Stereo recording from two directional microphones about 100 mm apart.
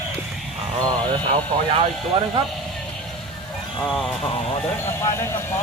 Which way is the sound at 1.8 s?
60° right (ahead or behind).